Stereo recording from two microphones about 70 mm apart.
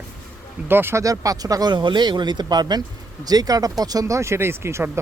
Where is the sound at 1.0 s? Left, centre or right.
Right.